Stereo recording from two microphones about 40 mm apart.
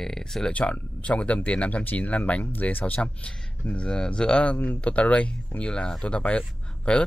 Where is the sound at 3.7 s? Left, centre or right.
Left.